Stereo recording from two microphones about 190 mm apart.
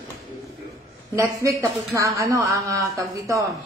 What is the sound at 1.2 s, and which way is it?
Speech, 15° right (ahead or behind).